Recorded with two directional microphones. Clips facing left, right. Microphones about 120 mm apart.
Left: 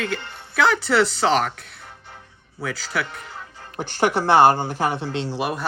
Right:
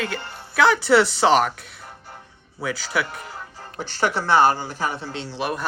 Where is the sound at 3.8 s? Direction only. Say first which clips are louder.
Left 3 dB; 55° left (ahead or behind).